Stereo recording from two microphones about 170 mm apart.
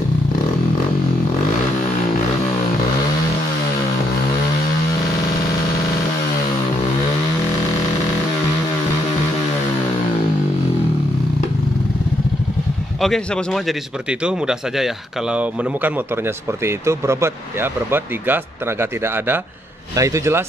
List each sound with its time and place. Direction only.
13.0 s speech: centre (ahead or behind)
16.6 s speech: 15° right (ahead or behind)